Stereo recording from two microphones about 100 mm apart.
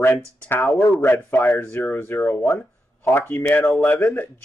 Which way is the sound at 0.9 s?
20° left (ahead or behind).